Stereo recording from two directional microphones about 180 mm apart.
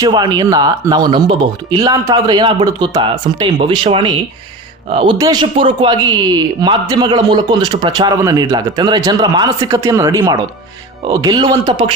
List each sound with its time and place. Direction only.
0.0 s speech: 25° right (ahead or behind)